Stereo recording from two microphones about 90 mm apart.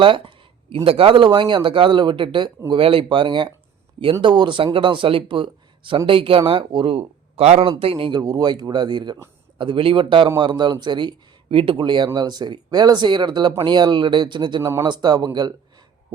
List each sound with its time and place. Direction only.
0.0 s a sound: 75° right (ahead or behind)
0.9 s speech: 90° right; by 2.5 s 70° right (ahead or behind)
2.6 s speech: 85° right
6.1 s speech: 85° right
8.2 s speech: 45° right (ahead or behind)
9.6 s speech: 70° right (ahead or behind)
10.2 s speech: 55° right (ahead or behind)
11.4 s speech: 90° right; by 15.5 s 50° right (ahead or behind)